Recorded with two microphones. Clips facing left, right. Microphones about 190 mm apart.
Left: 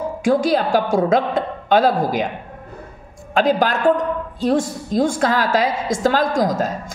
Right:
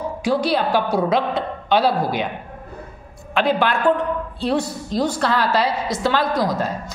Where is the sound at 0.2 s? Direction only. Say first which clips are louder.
Left 3 dB; 50° left (ahead or behind).